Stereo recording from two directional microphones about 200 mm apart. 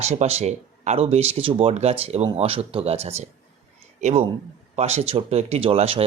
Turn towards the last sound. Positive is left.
turn(degrees=-30)  # may be behind; listen again after turning